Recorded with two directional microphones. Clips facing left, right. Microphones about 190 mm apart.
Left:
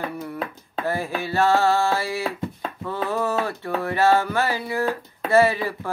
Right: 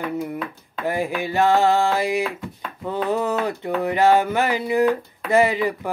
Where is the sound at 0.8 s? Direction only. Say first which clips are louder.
Right 3 dB; 15° right (ahead or behind).